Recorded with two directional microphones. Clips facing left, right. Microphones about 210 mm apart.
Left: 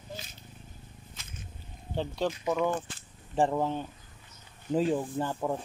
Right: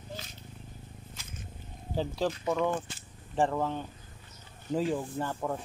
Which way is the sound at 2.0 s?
Centre (ahead or behind).